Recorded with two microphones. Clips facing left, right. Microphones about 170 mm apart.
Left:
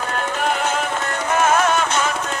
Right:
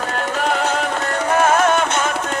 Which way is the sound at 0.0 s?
40° right (ahead or behind).